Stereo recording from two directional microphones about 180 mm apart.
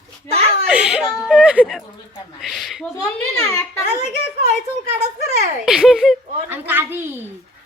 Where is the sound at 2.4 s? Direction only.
Centre (ahead or behind).